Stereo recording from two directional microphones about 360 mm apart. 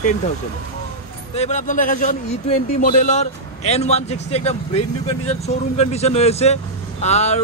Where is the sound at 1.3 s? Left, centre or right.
Centre.